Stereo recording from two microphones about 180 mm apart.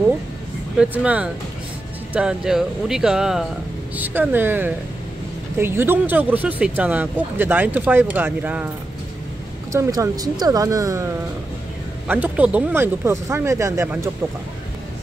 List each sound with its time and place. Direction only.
0.7 s speech: 10° right (ahead or behind)
9.7 s speech: 20° right (ahead or behind)
12.1 s speech: 10° right (ahead or behind)